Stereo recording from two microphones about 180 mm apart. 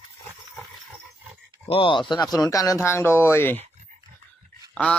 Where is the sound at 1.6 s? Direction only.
30° left (ahead or behind); by 3.6 s 10° left (ahead or behind).